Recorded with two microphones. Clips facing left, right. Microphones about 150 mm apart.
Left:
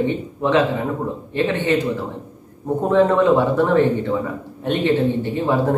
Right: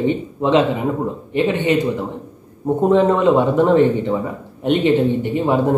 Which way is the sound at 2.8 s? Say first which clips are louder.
Right 1 dB; 15° right (ahead or behind).